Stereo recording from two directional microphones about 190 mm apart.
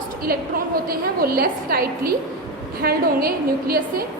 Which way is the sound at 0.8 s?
50° right (ahead or behind).